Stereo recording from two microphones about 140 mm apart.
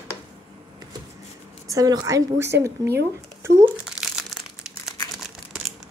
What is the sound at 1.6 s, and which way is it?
A woman's voice, 25° right (ahead or behind).